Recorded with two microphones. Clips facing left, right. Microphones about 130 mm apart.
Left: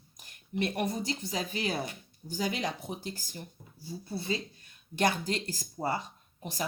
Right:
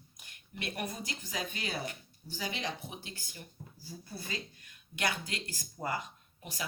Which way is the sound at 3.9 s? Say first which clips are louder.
Left 9 dB; 25° left (ahead or behind).